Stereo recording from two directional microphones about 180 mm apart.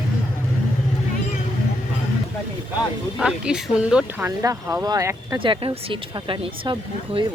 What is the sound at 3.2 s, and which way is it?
Speech, 5° right (ahead or behind).